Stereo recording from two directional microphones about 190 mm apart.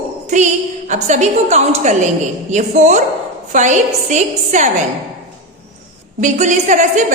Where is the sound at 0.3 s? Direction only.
40° right (ahead or behind).